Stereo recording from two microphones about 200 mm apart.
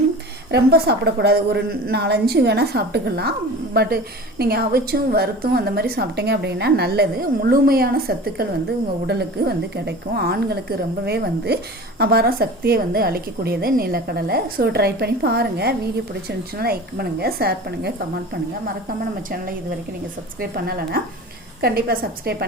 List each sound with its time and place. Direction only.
0.5 s speech: 55° right (ahead or behind)
20.4 s speech: 50° right (ahead or behind)